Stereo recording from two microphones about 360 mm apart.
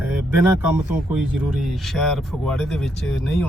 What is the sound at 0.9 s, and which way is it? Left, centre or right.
Speech, centre.